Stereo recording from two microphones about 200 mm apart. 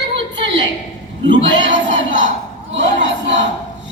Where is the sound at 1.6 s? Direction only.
65° right (ahead or behind).